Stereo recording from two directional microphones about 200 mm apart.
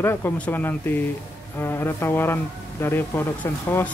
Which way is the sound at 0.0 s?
10° left (ahead or behind).